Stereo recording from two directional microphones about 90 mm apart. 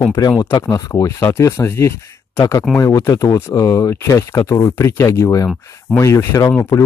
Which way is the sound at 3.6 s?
40° left (ahead or behind).